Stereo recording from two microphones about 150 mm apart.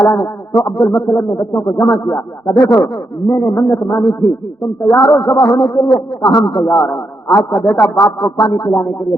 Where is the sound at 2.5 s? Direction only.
Centre (ahead or behind).